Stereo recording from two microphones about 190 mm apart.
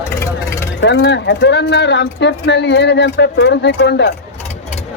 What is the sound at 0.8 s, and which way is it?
Speech, 65° left (ahead or behind).